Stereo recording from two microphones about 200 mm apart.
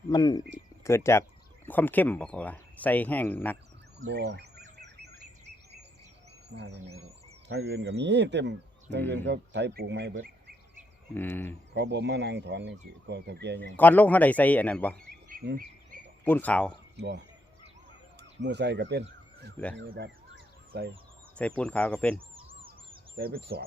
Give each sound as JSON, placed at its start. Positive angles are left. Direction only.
{"t": 0.1, "sound": "speech", "side_deg": 20}
{"t": 4.0, "sound": "speech", "side_deg": -55}
{"t": 7.4, "sound": "speech", "side_deg": -55}
{"t": 11.1, "sound": "speech", "side_deg": 10}
{"t": 11.7, "sound": "speech", "side_deg": -60}
{"t": 13.7, "sound": "speech", "side_deg": 10}
{"t": 15.3, "sound": "insect", "side_deg": -45}
{"t": 16.2, "sound": "speech", "side_deg": 10}
{"t": 18.2, "sound": "speech", "side_deg": -60}
{"t": 19.6, "sound": "speech", "side_deg": 10}
{"t": 19.9, "sound": "a sound", "side_deg": -55}
{"t": 21.3, "sound": "speech", "side_deg": 5}
{"t": 22.4, "sound": "a sound", "side_deg": -25}
{"t": 23.1, "sound": "speech", "side_deg": -50}